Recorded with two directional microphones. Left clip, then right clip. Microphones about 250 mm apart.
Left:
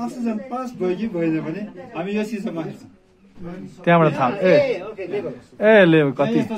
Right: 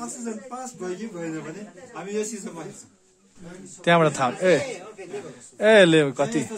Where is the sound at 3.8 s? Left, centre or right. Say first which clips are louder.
Left 3 dB; right.